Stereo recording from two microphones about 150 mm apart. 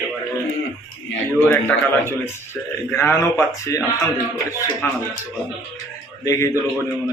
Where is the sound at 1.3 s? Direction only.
15° left (ahead or behind).